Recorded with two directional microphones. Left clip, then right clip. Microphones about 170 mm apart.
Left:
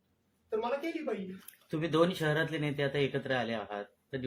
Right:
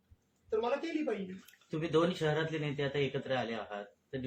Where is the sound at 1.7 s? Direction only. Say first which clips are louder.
Left 2 dB; 55° left (ahead or behind).